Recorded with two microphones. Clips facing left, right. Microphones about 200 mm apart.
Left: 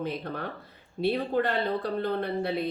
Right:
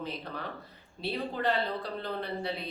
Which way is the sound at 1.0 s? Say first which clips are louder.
Left 6 dB; 55° left (ahead or behind).